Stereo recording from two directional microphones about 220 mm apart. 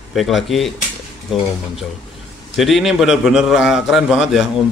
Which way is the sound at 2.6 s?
Centre (ahead or behind).